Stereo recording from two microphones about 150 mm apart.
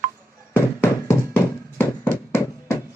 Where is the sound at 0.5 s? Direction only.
15° left (ahead or behind).